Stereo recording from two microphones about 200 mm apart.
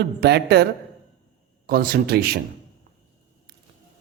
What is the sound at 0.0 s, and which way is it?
A man's voice, 55° right (ahead or behind).